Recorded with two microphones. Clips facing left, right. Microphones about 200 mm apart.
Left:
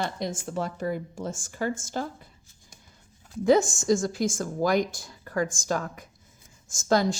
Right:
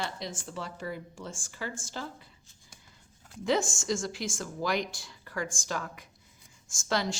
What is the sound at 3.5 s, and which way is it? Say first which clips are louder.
Speech: left 8 dB; 40° left (ahead or behind).